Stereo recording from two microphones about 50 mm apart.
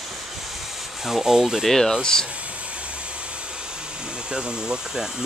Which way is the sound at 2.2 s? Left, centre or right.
Right.